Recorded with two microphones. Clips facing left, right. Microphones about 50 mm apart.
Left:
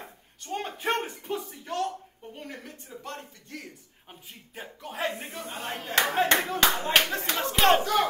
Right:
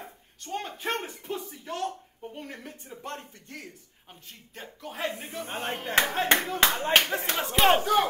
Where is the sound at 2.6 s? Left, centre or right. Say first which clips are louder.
Even; centre.